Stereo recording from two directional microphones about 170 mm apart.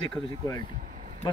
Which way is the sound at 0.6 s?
50° right (ahead or behind).